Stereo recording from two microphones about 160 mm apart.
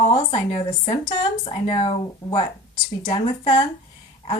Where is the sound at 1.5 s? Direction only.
35° left (ahead or behind).